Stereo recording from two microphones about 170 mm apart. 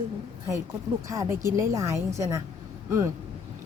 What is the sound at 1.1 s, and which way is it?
Speech, 20° right (ahead or behind).